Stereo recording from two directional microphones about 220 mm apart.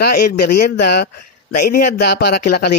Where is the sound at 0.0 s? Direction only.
40° left (ahead or behind).